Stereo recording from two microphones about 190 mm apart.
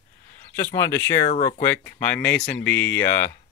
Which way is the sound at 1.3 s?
40° left (ahead or behind).